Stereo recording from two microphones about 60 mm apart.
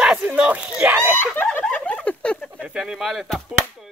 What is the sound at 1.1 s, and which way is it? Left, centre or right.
Snicker, left.